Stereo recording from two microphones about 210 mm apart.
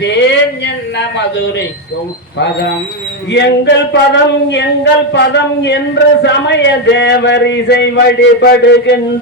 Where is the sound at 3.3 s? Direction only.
55° left (ahead or behind).